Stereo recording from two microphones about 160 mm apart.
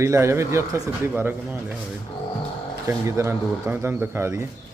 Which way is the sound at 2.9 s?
15° right (ahead or behind).